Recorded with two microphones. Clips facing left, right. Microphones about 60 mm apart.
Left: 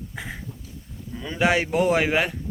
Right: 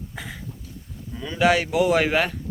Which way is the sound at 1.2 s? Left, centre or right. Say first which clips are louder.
Right 2 dB; left.